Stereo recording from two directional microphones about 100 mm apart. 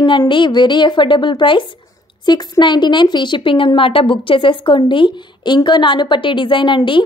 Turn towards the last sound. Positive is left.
turn(degrees=55)  # may be behind; listen again after turning